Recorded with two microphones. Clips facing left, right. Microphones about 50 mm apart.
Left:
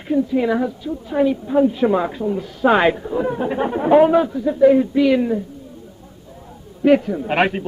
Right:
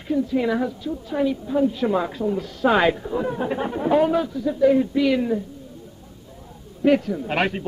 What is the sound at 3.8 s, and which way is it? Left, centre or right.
A woman's voice, left.